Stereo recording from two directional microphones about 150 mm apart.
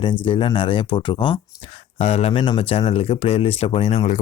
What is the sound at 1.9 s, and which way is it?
Speech, 45° left (ahead or behind).